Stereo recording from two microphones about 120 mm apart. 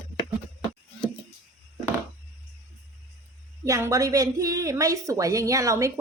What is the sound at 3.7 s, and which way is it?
A woman's voice, 25° right (ahead or behind).